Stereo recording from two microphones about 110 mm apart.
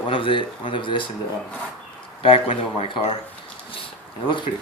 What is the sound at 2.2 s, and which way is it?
Speech, 60° left (ahead or behind).